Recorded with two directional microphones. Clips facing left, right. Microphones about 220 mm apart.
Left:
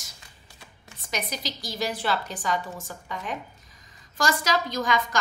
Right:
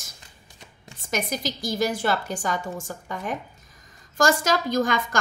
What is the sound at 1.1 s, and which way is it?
A woman's voice, 50° right (ahead or behind).